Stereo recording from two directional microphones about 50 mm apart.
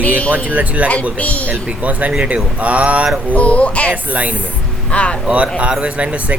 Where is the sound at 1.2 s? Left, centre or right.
Left.